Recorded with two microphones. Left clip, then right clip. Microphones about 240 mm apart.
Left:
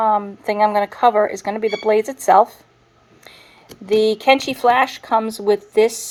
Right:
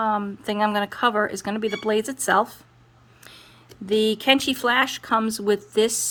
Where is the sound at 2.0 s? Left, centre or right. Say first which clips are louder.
Left 8 dB; right.